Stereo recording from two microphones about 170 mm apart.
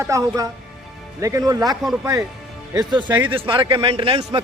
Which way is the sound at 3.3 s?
30° right (ahead or behind).